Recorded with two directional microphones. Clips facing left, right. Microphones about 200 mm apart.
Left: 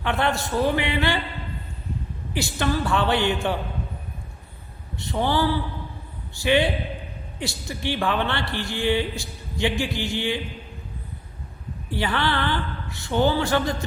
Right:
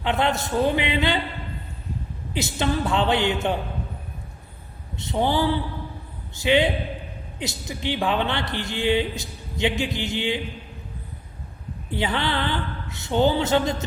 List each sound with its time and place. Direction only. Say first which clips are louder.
0.0 s a woman's voice: right 1 dB; 20° right (ahead or behind)
2.3 s a woman's voice: even; 20° right (ahead or behind)
4.9 s a woman's voice: right 1 dB; 20° right (ahead or behind)
11.9 s a woman's voice: even; 20° right (ahead or behind)